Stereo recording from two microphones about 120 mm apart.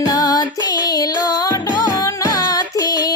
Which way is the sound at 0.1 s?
30° left (ahead or behind).